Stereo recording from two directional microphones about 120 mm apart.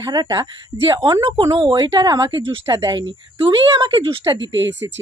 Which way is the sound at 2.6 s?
30° right (ahead or behind).